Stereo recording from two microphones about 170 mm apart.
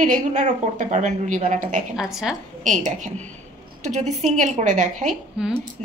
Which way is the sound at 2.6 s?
45° right (ahead or behind).